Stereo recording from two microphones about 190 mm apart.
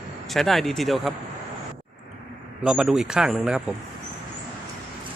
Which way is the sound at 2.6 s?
5° right (ahead or behind).